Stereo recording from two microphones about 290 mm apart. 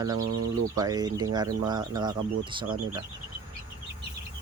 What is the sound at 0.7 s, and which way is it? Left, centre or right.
Speech, centre.